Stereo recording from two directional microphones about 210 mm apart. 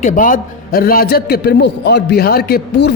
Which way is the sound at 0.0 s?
40° left (ahead or behind).